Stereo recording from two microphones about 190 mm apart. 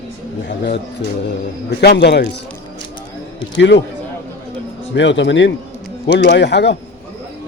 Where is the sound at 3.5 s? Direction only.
70° left (ahead or behind).